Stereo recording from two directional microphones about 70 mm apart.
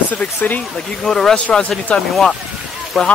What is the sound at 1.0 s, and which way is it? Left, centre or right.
Speech, centre.